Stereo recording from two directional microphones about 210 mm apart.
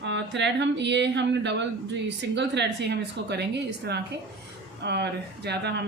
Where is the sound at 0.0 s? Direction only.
55° right (ahead or behind).